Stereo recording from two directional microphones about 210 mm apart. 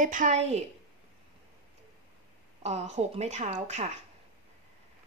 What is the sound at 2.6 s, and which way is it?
Speech, 30° right (ahead or behind).